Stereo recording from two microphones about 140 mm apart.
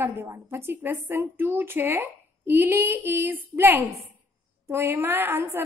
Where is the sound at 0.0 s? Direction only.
15° right (ahead or behind).